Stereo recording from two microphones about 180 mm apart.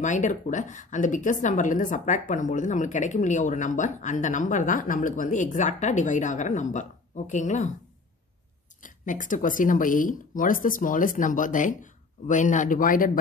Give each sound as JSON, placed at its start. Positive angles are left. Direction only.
{"t": 0.0, "sound": "a woman's voice", "side_deg": 45}
{"t": 8.8, "sound": "a woman's voice", "side_deg": 45}